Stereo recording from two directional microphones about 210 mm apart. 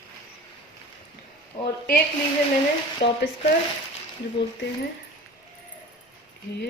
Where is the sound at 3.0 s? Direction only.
50° left (ahead or behind).